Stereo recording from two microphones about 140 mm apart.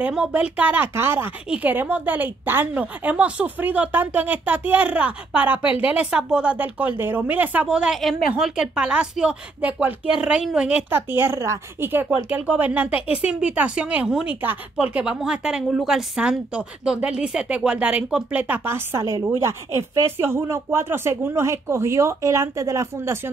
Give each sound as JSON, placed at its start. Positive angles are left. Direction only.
{"t": 0.0, "sound": "speech", "side_deg": -5}